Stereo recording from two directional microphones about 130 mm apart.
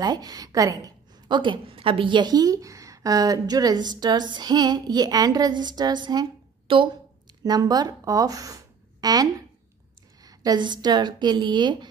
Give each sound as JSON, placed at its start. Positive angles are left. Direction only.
{"t": 0.0, "sound": "a woman's voice", "side_deg": -30}
{"t": 7.4, "sound": "a woman's voice", "side_deg": -30}